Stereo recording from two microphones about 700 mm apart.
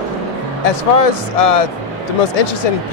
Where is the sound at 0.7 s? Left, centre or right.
Left.